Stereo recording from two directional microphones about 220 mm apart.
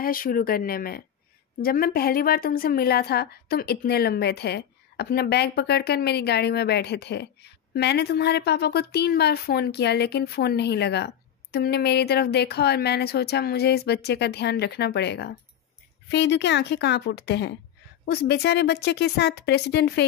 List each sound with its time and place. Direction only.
0.0 s a woman's voice: 40° left (ahead or behind)